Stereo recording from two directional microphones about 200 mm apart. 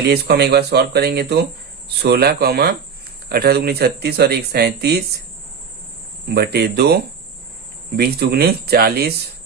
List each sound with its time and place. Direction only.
0.1 s speech: 55° right (ahead or behind)
6.2 s speech: 55° right (ahead or behind)